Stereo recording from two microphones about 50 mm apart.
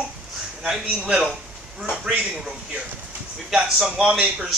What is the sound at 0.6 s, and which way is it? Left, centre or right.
Speech, centre.